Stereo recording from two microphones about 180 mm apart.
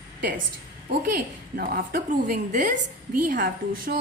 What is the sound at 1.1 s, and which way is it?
A woman's voice, 55° right (ahead or behind).